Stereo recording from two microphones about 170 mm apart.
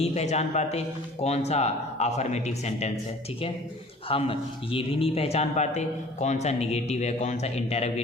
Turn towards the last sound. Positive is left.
turn(degrees=40)  # may be behind; listen again after turning